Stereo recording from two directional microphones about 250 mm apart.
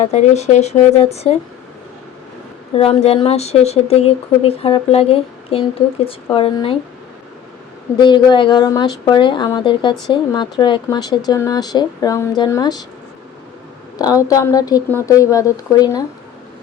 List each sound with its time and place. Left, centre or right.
0.0 s speech: left
2.7 s speech: left
7.9 s speech: centre
14.0 s speech: centre